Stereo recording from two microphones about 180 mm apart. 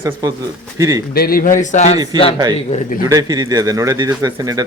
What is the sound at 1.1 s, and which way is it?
Speech, 55° left (ahead or behind).